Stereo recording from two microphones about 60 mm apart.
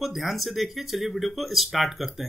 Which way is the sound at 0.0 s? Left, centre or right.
Centre.